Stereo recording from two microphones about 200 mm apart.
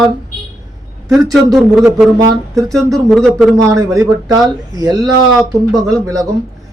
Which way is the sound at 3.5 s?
15° right (ahead or behind).